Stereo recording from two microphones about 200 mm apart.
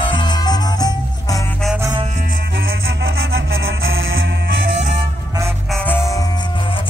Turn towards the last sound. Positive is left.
turn(degrees=10)  # may be behind; listen again after turning